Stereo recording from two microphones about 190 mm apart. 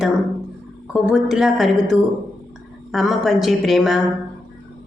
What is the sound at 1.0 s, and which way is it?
A woman's voice, centre (ahead or behind).